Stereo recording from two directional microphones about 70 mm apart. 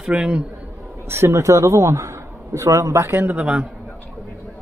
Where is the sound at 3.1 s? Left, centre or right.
Right.